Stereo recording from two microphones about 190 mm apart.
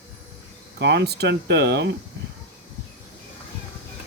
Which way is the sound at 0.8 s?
60° right (ahead or behind).